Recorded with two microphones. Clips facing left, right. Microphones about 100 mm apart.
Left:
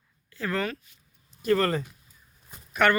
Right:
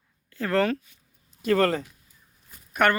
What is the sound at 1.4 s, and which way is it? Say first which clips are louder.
Speech: right 2 dB; 90° right.